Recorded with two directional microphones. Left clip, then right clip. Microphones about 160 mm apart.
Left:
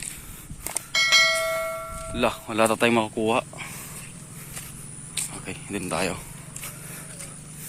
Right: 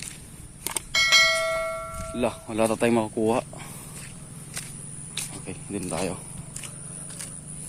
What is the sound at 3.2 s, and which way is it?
Speech, 25° right (ahead or behind).